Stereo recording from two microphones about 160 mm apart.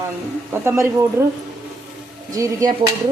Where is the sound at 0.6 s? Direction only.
15° right (ahead or behind).